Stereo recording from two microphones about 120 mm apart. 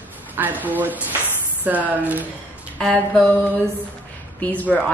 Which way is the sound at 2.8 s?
10° left (ahead or behind).